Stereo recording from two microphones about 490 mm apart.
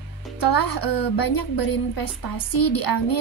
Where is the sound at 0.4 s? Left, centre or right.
Left.